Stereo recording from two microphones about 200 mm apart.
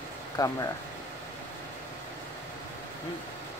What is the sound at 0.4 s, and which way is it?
Speech, 20° left (ahead or behind).